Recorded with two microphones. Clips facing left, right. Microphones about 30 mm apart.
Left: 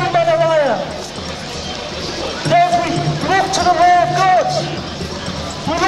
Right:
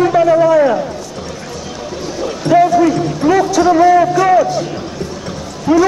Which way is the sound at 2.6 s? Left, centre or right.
Left.